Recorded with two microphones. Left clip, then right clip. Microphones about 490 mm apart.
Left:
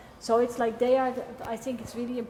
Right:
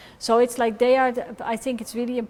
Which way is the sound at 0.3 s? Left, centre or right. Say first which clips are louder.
Right 5 dB; right.